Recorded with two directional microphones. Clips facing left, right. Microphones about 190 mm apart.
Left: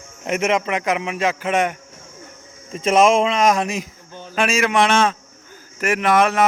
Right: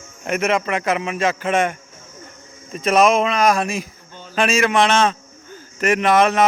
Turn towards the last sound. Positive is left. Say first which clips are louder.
# right 1 dB
turn(degrees=5)  # may be behind; listen again after turning